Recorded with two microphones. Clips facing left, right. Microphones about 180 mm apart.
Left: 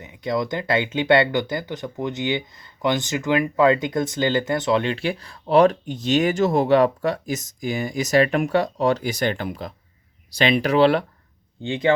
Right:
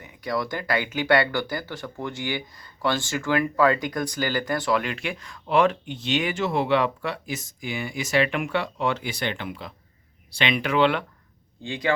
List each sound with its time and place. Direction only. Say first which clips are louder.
0.0 s speech: left 4 dB; 20° left (ahead or behind); by 11.0 s 35° left (ahead or behind)
11.6 s speech: left 6 dB; 25° left (ahead or behind)